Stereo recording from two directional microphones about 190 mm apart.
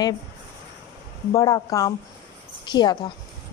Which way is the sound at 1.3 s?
15° left (ahead or behind).